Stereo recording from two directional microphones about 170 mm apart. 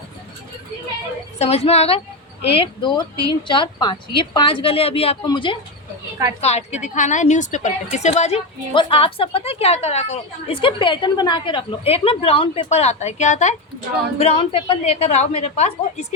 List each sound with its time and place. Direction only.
1.4 s a woman's voice: 40° left (ahead or behind)
6.4 s a woman's voice: 40° left (ahead or behind)
14.2 s a woman's voice: 35° left (ahead or behind)